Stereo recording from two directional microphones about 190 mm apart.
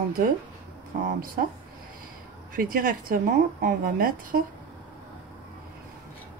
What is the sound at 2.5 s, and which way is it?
Speech, 50° right (ahead or behind).